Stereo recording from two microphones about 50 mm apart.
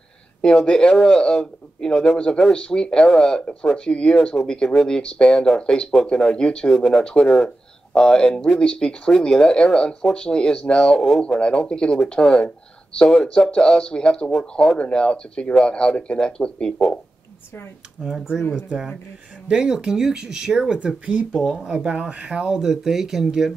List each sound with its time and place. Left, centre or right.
0.4 s speech: centre
18.0 s speech: centre
19.4 s speech: centre
20.8 s speech: right
21.3 s speech: centre